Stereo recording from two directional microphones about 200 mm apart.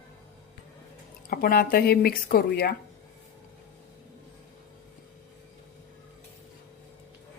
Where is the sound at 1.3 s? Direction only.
50° left (ahead or behind).